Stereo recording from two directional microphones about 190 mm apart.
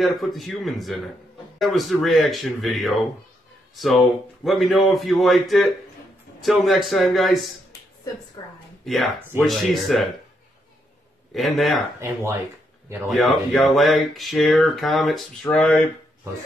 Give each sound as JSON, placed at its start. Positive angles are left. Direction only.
{"t": 0.0, "sound": "speech", "side_deg": 0}
{"t": 8.4, "sound": "speech", "side_deg": 20}
{"t": 8.8, "sound": "speech", "side_deg": 0}
{"t": 11.3, "sound": "speech", "side_deg": 0}
{"t": 12.0, "sound": "speech", "side_deg": -15}
{"t": 13.1, "sound": "speech", "side_deg": 0}
{"t": 15.5, "sound": "speech", "side_deg": 15}